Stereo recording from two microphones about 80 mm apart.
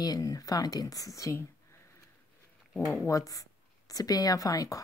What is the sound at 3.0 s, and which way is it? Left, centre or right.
Speech, left.